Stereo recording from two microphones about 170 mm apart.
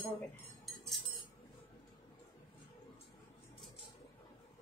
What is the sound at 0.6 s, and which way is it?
Cutlery, centre (ahead or behind).